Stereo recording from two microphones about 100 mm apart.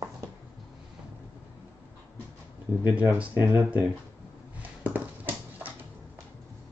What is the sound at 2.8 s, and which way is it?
Speech, 15° right (ahead or behind).